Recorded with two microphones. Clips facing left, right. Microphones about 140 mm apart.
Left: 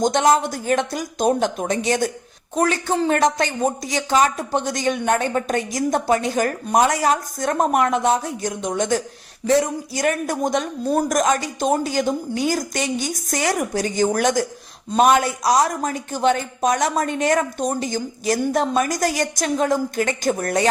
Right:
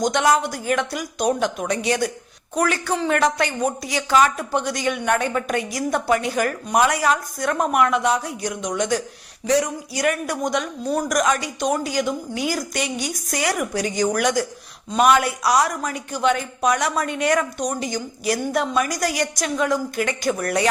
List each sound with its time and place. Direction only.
0.5 s a woman's voice: 40° left (ahead or behind)
1.2 s a woman's voice: 30° left (ahead or behind)
1.7 s a woman's voice: 45° left (ahead or behind)
11.6 s a woman's voice: 30° left (ahead or behind)
11.9 s a woman's voice: 45° left (ahead or behind)
14.9 s a woman's voice: 30° left (ahead or behind)
15.8 s a woman's voice: 40° left (ahead or behind)
17.6 s a woman's voice: 25° left (ahead or behind)
17.9 s a woman's voice: 45° left (ahead or behind)